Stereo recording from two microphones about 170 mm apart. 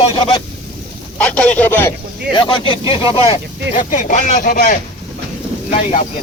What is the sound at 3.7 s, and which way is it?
Speech, 50° left (ahead or behind).